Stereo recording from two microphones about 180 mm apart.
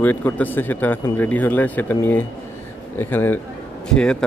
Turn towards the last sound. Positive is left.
turn(degrees=5)  # may be behind; listen again after turning